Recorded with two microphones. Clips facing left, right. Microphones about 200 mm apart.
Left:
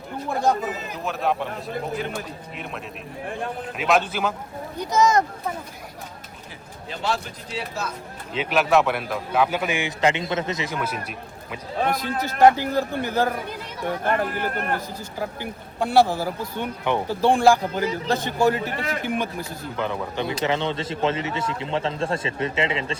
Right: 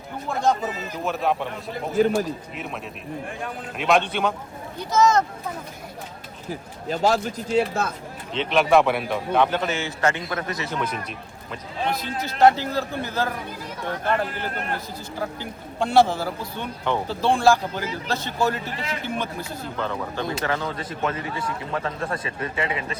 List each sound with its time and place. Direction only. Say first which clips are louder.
1.0 s a man's voice: right 1 dB; centre (ahead or behind)
3.8 s a man's voice: right 1 dB; centre (ahead or behind)
4.8 s speech: even; 15° left (ahead or behind)
6.5 s speech: right 9 dB; 40° right (ahead or behind)
8.3 s speech: right 1 dB; 5° left (ahead or behind)
11.8 s a man's voice: left 3 dB; 50° left (ahead or behind)
12.5 s speech: left 3 dB; 15° left (ahead or behind)
14.0 s a man's voice: left 1 dB; 50° left (ahead or behind)
15.4 s speech: even; 5° left (ahead or behind)
18.6 s a man's voice: left 3 dB; 50° left (ahead or behind)
19.0 s a man's voice: left 2 dB; 15° left (ahead or behind)